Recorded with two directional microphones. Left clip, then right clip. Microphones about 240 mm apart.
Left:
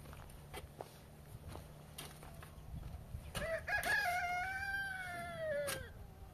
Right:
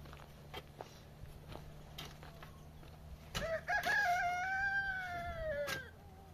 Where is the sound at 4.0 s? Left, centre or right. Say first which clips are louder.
Right 3 dB; left.